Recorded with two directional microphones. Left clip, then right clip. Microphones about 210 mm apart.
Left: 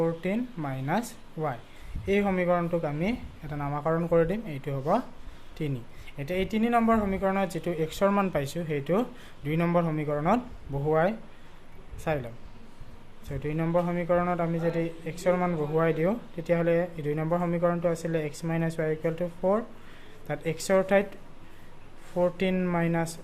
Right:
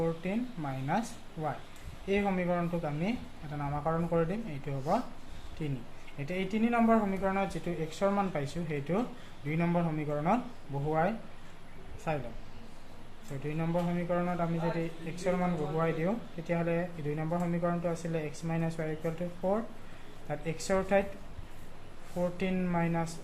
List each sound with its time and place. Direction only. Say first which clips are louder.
0.0 s a man's voice: left 5 dB; 55° left (ahead or behind)
13.4 s a man's voice: left 6 dB; 55° left (ahead or behind)
22.2 s a man's voice: left 7 dB; 55° left (ahead or behind)